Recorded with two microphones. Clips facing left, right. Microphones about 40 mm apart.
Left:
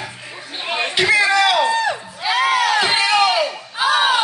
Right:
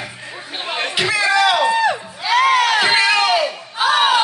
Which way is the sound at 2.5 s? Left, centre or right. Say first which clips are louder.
Right 2 dB; right.